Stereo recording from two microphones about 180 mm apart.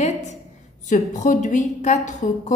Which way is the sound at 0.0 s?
40° left (ahead or behind).